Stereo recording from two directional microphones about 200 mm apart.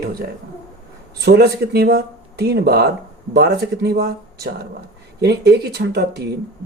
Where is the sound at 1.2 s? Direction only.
55° right (ahead or behind).